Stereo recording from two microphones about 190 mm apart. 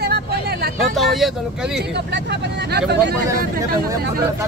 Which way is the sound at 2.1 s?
60° right (ahead or behind).